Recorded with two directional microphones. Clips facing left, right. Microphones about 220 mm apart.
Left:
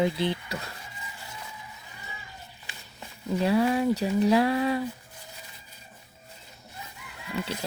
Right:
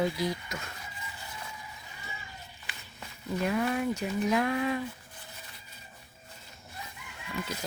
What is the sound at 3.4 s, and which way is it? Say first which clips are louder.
Speech: left 6 dB; 30° left (ahead or behind).